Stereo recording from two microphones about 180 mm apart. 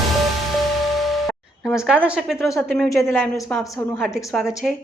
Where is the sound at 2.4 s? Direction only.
15° left (ahead or behind).